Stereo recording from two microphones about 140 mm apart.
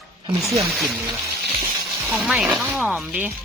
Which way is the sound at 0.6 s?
Centre (ahead or behind).